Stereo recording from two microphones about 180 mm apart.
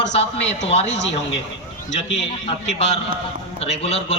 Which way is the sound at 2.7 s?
35° left (ahead or behind).